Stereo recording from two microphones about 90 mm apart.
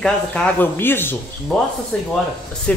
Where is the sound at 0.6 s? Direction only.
25° left (ahead or behind).